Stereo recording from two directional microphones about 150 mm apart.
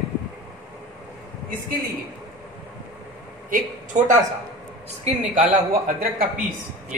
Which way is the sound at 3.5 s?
55° right (ahead or behind).